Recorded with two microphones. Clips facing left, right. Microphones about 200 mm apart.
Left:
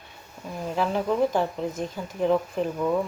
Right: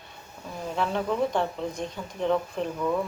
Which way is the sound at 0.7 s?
5° left (ahead or behind).